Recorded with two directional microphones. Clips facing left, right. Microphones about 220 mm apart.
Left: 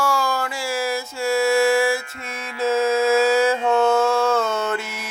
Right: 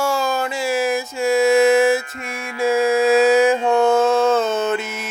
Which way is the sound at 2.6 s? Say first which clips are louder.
Right 2 dB; 15° right (ahead or behind).